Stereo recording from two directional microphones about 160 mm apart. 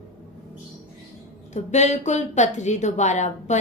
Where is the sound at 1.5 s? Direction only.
45° left (ahead or behind).